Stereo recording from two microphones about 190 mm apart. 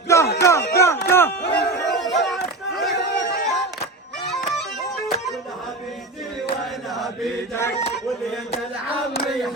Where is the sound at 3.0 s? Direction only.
55° left (ahead or behind).